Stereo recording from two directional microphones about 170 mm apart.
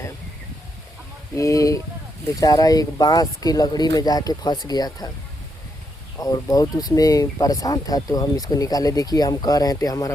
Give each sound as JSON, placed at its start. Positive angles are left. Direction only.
{"t": 1.4, "sound": "speech", "side_deg": 20}
{"t": 6.1, "sound": "speech", "side_deg": 20}